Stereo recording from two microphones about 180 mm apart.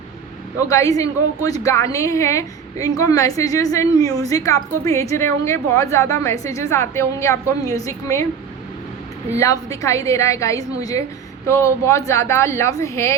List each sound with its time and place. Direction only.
0.7 s a woman's voice: 20° left (ahead or behind)
9.3 s a woman's voice: 15° left (ahead or behind)